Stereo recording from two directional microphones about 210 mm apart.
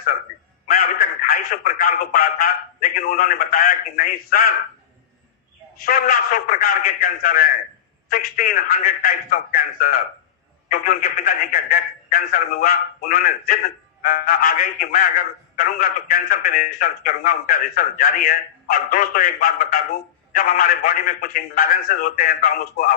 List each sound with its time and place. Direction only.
1.3 s a man's voice: 40° left (ahead or behind)
5.8 s a man's voice: 40° left (ahead or behind)